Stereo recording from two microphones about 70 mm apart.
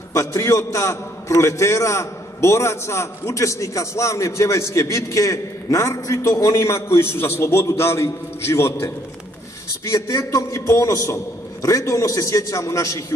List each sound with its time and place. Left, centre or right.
0.1 s a man's voice: left